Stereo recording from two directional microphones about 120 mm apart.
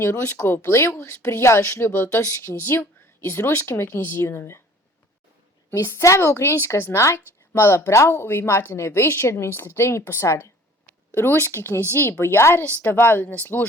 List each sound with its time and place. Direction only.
0.0 s a woman's voice: 20° left (ahead or behind)
5.7 s a woman's voice: 25° left (ahead or behind)